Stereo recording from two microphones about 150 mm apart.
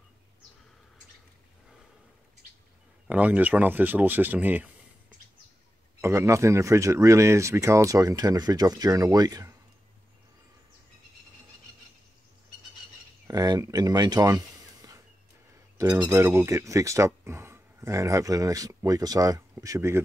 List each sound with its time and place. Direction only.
3.1 s speech: 10° right (ahead or behind)
5.9 s speech: 20° right (ahead or behind)
13.3 s speech: 25° right (ahead or behind)
15.8 s speech: 20° right (ahead or behind)